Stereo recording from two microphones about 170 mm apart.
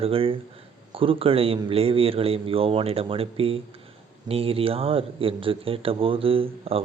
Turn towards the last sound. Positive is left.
turn(degrees=-35)  # may be behind; listen again after turning